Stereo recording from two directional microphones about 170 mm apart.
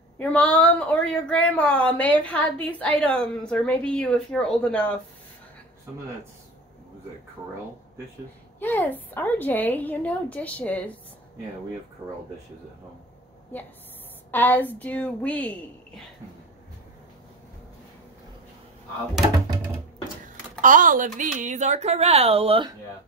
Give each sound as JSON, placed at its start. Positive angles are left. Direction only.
{"t": 0.2, "sound": "a woman's voice", "side_deg": 5}
{"t": 8.5, "sound": "a woman's voice", "side_deg": 10}
{"t": 14.3, "sound": "a woman's voice", "side_deg": 10}
{"t": 20.6, "sound": "speech", "side_deg": -50}